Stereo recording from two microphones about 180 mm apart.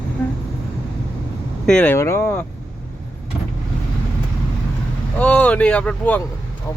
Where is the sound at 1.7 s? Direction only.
5° left (ahead or behind).